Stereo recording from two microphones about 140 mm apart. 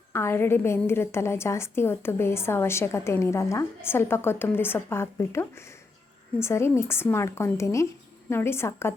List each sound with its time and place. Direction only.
0.1 s a woman's voice: 15° left (ahead or behind)